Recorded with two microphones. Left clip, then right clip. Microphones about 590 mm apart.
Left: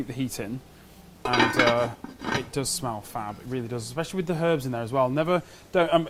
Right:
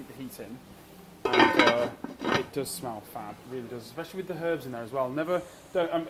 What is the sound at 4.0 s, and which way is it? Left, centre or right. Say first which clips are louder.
A man's voice: left 7 dB; left.